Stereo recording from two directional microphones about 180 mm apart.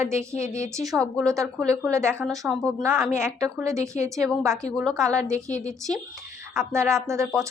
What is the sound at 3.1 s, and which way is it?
A woman's voice, 15° right (ahead or behind).